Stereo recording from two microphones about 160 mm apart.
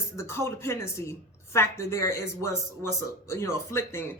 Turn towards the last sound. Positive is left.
turn(degrees=15)  # may be behind; listen again after turning